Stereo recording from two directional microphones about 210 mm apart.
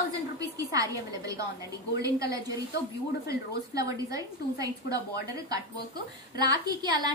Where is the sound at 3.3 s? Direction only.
15° right (ahead or behind).